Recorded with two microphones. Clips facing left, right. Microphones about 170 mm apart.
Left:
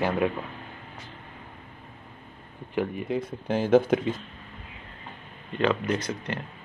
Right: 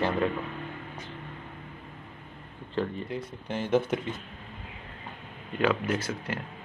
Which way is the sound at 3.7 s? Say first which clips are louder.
Left 6 dB; 90° left.